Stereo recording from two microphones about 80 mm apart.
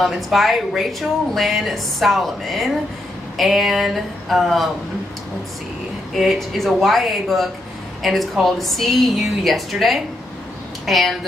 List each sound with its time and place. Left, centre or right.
0.0 s a woman's voice: centre
6.1 s a woman's voice: centre